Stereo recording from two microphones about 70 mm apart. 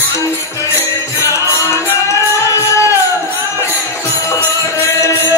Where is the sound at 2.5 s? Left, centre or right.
Left.